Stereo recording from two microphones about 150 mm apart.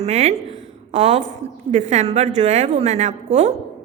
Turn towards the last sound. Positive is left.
turn(degrees=-50)  # may be behind; listen again after turning